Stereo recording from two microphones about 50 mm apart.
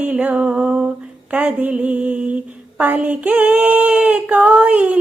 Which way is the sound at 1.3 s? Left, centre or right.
Right.